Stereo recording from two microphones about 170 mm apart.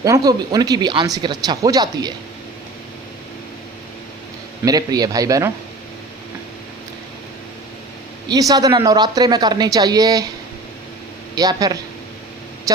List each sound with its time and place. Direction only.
0.0 s speech: 20° right (ahead or behind)
4.6 s speech: 20° right (ahead or behind)
8.3 s speech: 20° right (ahead or behind)
11.3 s speech: 20° right (ahead or behind)